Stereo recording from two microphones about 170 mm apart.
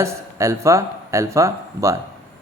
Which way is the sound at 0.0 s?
15° right (ahead or behind).